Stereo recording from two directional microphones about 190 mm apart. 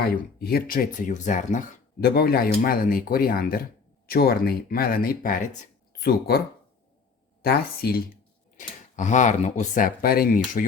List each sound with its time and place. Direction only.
0.3 s speech: 55° left (ahead or behind)
7.4 s speech: 55° left (ahead or behind)
8.5 s speech: 40° left (ahead or behind)